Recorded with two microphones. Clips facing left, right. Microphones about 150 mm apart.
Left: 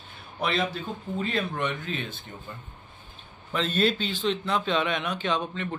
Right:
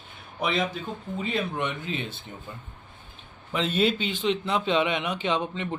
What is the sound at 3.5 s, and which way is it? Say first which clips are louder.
Speech: right 1 dB; 15° right (ahead or behind).